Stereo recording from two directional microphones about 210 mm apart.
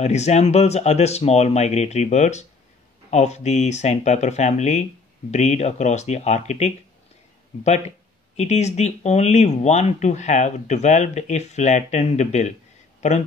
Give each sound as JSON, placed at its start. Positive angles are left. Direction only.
{"t": 0.0, "sound": "speech", "side_deg": 30}
{"t": 8.4, "sound": "speech", "side_deg": 30}